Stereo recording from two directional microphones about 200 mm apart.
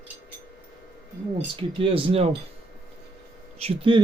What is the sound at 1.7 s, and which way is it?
Speech, 25° right (ahead or behind).